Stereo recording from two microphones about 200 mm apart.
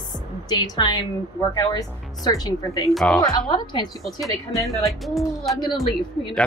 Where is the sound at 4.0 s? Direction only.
Centre (ahead or behind).